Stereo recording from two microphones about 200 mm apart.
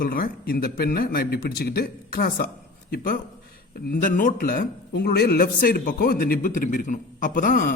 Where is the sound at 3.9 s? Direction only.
45° left (ahead or behind).